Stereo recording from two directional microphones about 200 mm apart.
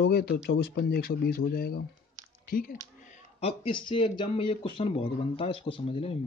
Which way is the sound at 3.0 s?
35° left (ahead or behind).